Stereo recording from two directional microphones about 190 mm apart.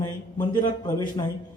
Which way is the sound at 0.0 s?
20° left (ahead or behind).